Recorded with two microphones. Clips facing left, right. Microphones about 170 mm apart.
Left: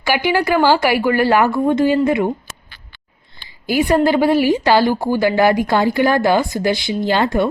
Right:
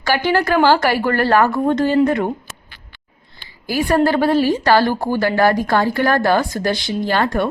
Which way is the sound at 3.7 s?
20° left (ahead or behind).